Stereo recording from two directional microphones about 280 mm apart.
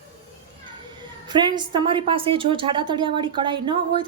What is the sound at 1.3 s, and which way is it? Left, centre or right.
A woman's voice, centre.